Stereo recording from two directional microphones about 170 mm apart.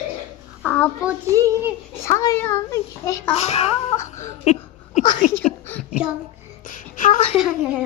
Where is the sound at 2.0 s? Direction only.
20° left (ahead or behind).